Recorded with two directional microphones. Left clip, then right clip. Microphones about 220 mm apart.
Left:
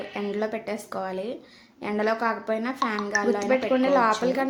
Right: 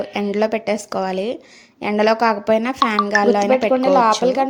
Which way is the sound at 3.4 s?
20° right (ahead or behind).